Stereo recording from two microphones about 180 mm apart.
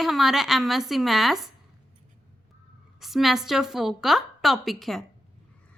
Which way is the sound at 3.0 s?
Centre (ahead or behind).